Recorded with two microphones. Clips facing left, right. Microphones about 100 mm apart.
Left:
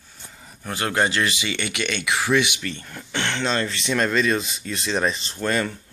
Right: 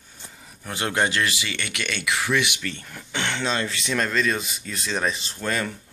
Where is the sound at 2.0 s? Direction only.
30° left (ahead or behind).